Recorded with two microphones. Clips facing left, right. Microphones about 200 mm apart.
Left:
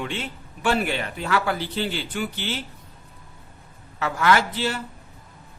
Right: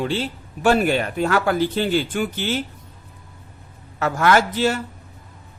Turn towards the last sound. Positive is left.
turn(degrees=-45)  # may be behind; listen again after turning